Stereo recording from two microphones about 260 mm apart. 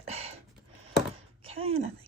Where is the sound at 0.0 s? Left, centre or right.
Right.